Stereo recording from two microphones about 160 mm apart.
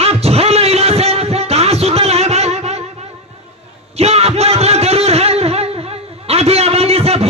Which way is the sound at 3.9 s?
40° right (ahead or behind).